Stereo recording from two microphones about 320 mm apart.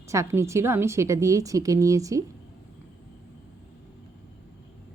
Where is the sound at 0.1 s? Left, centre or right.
Centre.